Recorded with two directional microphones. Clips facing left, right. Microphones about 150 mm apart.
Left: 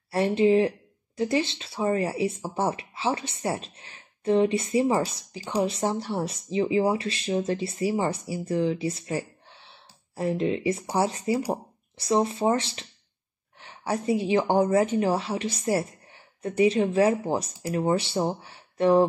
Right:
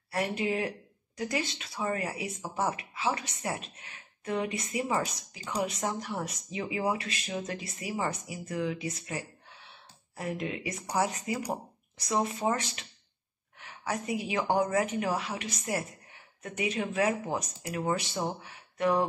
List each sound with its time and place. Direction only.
0.1 s speech: 30° left (ahead or behind)